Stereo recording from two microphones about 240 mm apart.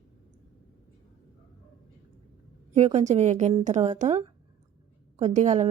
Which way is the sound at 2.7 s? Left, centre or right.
Right.